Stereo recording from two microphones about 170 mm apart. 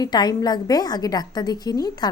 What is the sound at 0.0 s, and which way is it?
A woman's voice, 25° left (ahead or behind).